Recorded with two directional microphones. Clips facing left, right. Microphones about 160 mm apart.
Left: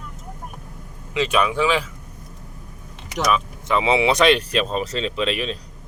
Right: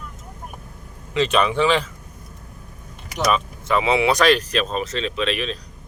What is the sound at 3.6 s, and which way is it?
Speech, 20° left (ahead or behind).